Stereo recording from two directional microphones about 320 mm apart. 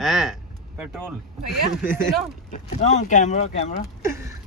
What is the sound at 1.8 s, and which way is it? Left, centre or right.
Speech, centre.